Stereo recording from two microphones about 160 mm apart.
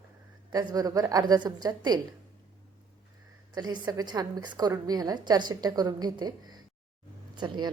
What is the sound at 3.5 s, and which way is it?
A woman's voice, 25° right (ahead or behind).